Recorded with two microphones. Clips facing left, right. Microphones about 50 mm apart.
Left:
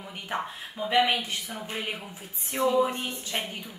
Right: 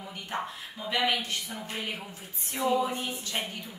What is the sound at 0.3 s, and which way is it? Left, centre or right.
Speech, left.